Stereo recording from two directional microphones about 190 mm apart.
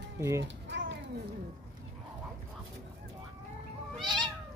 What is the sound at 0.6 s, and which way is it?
Cat, 70° right (ahead or behind).